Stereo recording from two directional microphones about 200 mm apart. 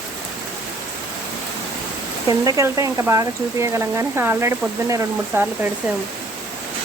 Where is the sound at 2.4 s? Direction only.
15° right (ahead or behind).